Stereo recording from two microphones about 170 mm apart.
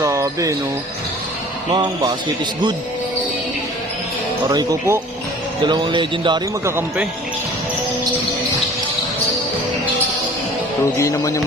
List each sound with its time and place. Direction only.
0.0 s basketball bounce: 20° right (ahead or behind)
1.7 s speech: 25° right (ahead or behind)
4.4 s speech: 20° right (ahead or behind)
6.7 s speech: 10° right (ahead or behind)
10.9 s speech: 20° left (ahead or behind)